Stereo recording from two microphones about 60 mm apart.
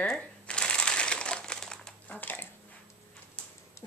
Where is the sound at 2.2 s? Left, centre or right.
Left.